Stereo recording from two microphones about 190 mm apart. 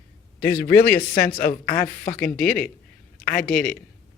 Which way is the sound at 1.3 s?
50° left (ahead or behind).